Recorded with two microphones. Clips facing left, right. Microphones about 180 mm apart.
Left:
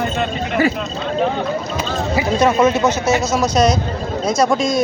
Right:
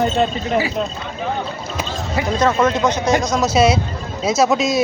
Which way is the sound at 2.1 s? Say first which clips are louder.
Left 2 dB; 10° left (ahead or behind).